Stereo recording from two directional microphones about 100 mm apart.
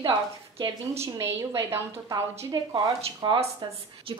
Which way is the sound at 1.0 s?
30° right (ahead or behind).